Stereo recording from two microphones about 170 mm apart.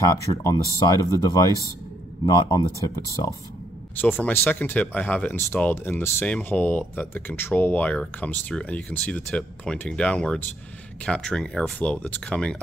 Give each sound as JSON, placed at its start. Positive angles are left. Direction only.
{"t": 0.0, "sound": "speech", "side_deg": 20}
{"t": 3.9, "sound": "speech", "side_deg": 10}